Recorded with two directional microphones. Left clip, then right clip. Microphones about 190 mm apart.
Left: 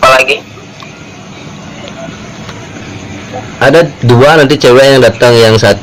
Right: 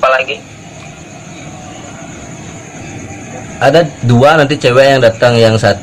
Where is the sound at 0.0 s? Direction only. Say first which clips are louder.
Left 6 dB; 20° left (ahead or behind).